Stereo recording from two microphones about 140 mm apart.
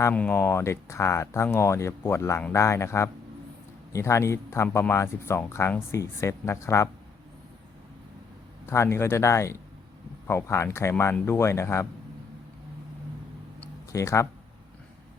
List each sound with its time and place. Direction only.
0.1 s speech: 10° left (ahead or behind)
8.6 s speech: 20° left (ahead or behind)
13.9 s speech: 20° left (ahead or behind)